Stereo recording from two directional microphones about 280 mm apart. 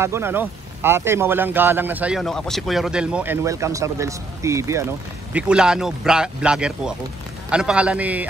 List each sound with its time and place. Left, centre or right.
0.0 s speech: centre